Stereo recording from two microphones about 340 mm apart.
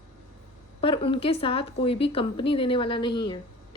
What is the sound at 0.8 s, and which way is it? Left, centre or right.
Speech, centre.